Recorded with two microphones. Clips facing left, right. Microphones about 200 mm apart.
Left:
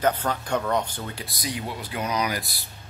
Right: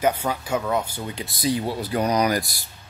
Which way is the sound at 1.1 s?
30° right (ahead or behind).